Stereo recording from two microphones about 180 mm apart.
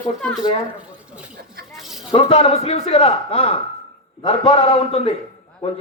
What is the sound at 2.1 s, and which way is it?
A man's voice, 30° left (ahead or behind).